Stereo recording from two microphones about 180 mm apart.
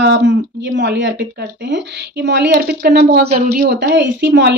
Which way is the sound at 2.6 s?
65° right (ahead or behind).